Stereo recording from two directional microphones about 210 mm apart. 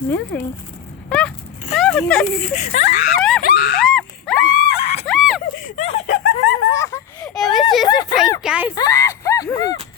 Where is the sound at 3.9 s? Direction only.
5° left (ahead or behind).